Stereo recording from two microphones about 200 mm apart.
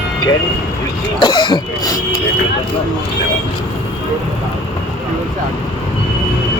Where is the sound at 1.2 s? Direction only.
20° left (ahead or behind).